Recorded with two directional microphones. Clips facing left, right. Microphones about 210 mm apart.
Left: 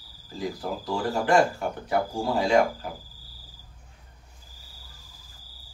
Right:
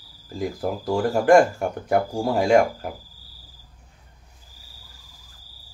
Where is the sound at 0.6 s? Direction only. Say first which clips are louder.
Right 8 dB; 45° right (ahead or behind).